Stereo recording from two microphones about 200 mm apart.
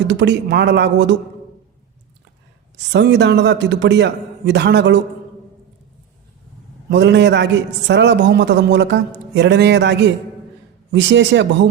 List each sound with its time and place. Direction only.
0.1 s a man's voice: 60° right (ahead or behind)
2.7 s a man's voice: 60° right (ahead or behind)
6.9 s a man's voice: 60° right (ahead or behind)